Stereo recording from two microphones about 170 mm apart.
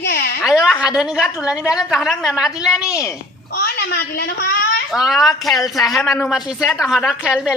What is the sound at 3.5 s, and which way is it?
A child's voice, 75° left (ahead or behind).